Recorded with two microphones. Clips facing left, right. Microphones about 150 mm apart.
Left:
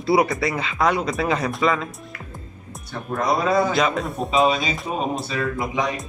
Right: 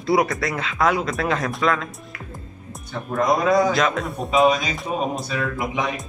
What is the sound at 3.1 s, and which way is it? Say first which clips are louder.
Speech: right 2 dB; centre (ahead or behind).